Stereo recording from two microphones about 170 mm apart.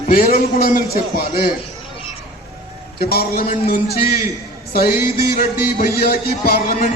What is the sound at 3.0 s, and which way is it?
A man's voice, 65° left (ahead or behind).